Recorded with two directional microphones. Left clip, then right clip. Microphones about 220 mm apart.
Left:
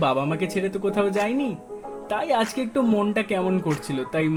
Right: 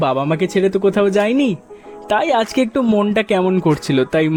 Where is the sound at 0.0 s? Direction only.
40° right (ahead or behind).